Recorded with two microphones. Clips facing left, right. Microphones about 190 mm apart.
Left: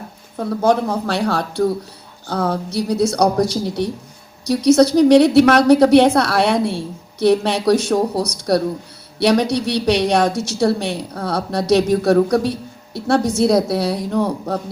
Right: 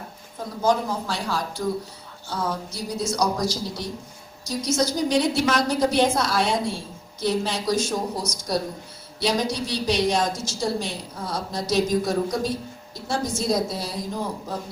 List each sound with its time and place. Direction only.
0.3 s a woman's voice: 65° left (ahead or behind)